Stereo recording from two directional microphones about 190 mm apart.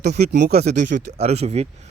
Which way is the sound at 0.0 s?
60° right (ahead or behind).